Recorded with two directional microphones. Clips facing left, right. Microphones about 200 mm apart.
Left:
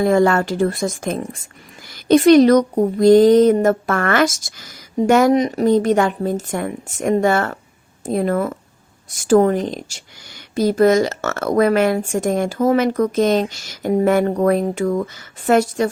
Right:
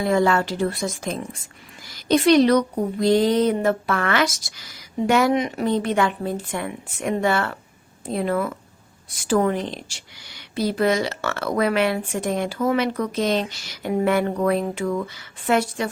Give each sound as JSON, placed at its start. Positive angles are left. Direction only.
{"t": 0.0, "sound": "speech", "side_deg": 50}